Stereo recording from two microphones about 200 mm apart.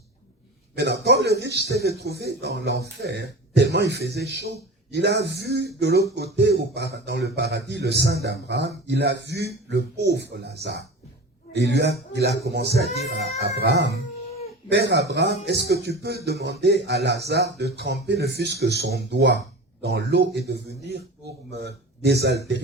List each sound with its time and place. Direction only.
0.8 s speech: 55° right (ahead or behind)